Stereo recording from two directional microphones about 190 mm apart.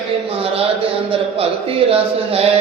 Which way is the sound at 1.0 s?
30° right (ahead or behind).